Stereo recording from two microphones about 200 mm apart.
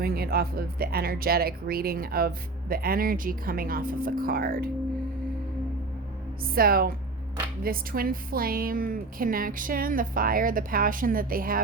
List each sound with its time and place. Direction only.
0.0 s speech: 50° right (ahead or behind)
6.4 s speech: 45° right (ahead or behind)